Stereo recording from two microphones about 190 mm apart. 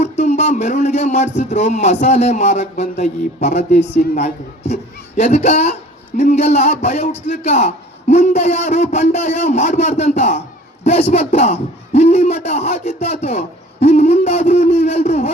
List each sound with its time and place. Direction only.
0.0 s a man's voice: 40° left (ahead or behind)